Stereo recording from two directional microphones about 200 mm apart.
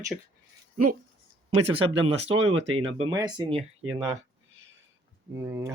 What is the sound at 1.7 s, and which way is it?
Speech, 25° right (ahead or behind).